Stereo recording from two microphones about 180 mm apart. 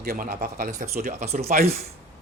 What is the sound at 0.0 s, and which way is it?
Speech, 55° right (ahead or behind).